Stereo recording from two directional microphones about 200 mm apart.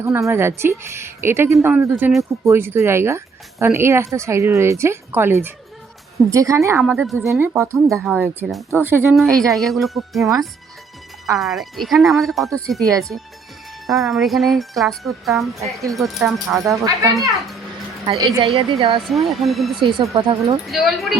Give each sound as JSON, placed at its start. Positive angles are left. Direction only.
{"t": 0.0, "sound": "speech", "side_deg": -15}
{"t": 6.8, "sound": "a woman's voice", "side_deg": 0}
{"t": 16.6, "sound": "a woman's voice", "side_deg": -15}
{"t": 19.1, "sound": "a woman's voice", "side_deg": 0}
{"t": 19.8, "sound": "a woman's voice", "side_deg": -25}
{"t": 20.7, "sound": "a woman's voice", "side_deg": 0}